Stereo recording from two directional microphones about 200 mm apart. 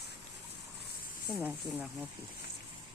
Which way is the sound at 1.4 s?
10° right (ahead or behind).